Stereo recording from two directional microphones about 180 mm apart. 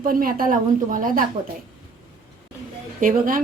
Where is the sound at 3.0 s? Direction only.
50° right (ahead or behind).